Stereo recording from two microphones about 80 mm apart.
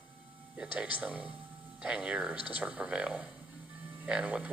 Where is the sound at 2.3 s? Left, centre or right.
Left.